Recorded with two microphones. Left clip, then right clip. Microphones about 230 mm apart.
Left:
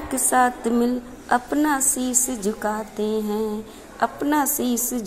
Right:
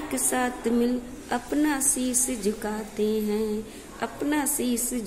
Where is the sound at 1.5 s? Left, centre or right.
Centre.